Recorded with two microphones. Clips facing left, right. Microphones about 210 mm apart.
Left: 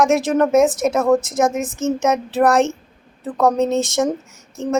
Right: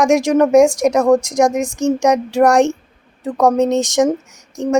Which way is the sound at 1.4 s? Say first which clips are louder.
Right 3 dB; centre (ahead or behind).